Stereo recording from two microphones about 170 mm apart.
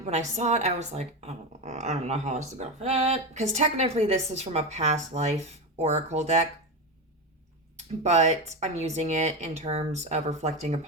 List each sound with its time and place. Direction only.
0.0 s speech: 40° right (ahead or behind)
8.0 s speech: 40° right (ahead or behind)